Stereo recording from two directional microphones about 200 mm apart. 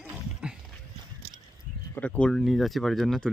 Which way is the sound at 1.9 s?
5° left (ahead or behind).